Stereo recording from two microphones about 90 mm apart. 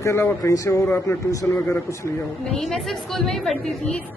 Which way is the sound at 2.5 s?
5° left (ahead or behind).